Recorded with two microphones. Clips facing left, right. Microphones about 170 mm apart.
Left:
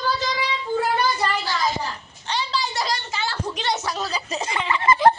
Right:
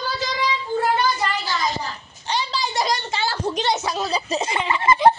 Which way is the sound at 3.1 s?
35° right (ahead or behind).